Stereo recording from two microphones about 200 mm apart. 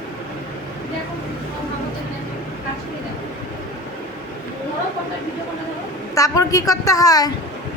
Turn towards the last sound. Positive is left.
turn(degrees=20)  # may be behind; listen again after turning